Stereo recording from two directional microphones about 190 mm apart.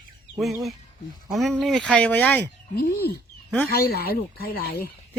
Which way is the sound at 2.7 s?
55° left (ahead or behind).